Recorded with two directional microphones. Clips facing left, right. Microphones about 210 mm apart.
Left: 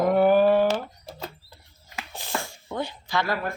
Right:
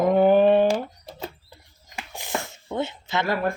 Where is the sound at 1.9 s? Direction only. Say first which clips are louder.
Right 2 dB; 15° right (ahead or behind).